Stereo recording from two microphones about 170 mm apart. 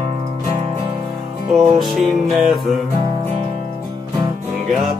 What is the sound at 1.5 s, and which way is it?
Music, centre (ahead or behind).